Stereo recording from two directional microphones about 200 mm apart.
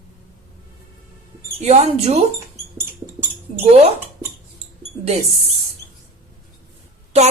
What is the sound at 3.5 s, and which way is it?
Speech, 30° right (ahead or behind).